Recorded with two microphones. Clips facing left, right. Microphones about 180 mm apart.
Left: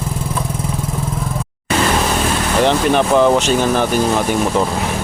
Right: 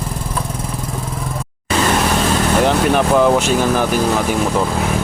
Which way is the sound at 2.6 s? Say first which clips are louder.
Left 3 dB; 5° right (ahead or behind).